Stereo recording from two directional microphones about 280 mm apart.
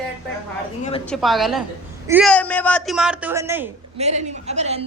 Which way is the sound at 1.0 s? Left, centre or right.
Centre.